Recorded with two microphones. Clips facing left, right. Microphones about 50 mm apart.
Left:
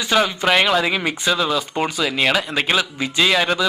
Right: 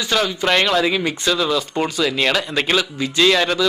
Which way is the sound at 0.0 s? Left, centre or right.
Centre.